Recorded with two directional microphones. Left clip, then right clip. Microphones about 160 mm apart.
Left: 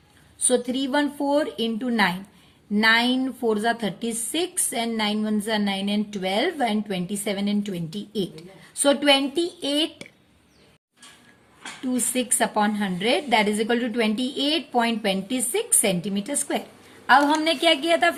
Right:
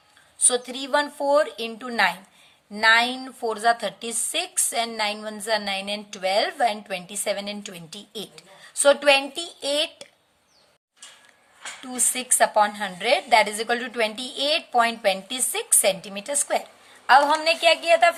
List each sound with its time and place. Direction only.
0.4 s a woman's voice: 35° right (ahead or behind)
11.9 s a woman's voice: 35° right (ahead or behind)
17.1 s a woman's voice: 20° right (ahead or behind)